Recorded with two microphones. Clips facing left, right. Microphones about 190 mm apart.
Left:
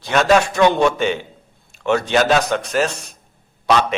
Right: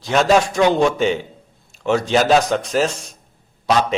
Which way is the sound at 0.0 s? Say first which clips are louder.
Even; 60° left (ahead or behind).